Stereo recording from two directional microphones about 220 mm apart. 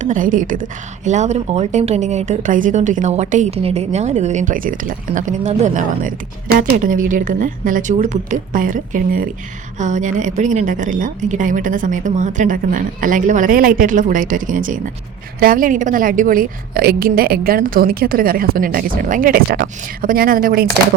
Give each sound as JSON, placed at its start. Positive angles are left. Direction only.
{"t": 0.0, "sound": "speech", "side_deg": -35}